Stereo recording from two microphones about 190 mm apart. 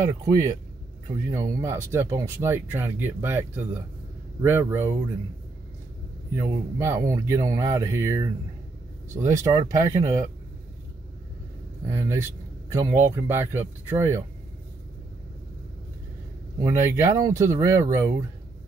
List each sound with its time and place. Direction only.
0.0 s speech: 20° right (ahead or behind)
6.3 s speech: 15° right (ahead or behind)
9.3 s speech: 15° right (ahead or behind)
11.9 s speech: 15° right (ahead or behind)
16.6 s speech: 20° right (ahead or behind)